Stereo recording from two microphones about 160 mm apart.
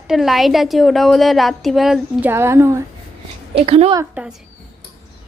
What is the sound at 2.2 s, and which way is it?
Speech, 15° right (ahead or behind).